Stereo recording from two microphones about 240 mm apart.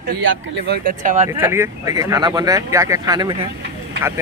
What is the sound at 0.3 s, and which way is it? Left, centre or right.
Speech, right.